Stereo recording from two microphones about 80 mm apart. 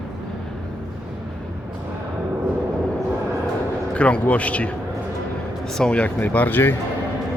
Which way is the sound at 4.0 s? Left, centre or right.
Centre.